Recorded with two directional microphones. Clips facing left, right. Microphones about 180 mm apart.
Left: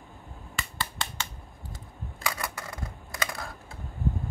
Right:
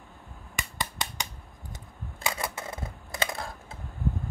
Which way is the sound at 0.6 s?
15° right (ahead or behind).